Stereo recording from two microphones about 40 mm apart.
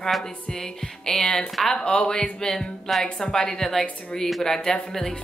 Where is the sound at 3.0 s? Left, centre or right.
Left.